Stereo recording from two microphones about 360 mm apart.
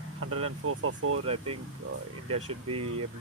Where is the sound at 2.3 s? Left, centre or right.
Right.